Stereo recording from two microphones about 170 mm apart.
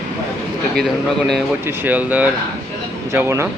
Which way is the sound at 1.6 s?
10° right (ahead or behind).